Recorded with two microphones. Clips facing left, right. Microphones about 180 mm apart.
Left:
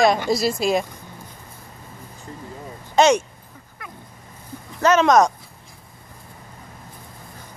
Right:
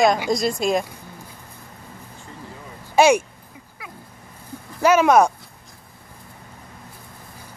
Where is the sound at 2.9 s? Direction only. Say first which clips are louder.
Right 1 dB; 10° right (ahead or behind).